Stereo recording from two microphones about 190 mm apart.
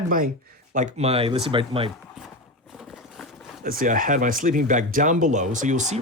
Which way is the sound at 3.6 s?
45° right (ahead or behind).